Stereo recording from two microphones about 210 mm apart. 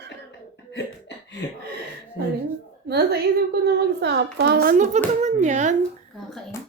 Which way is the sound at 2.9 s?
50° right (ahead or behind).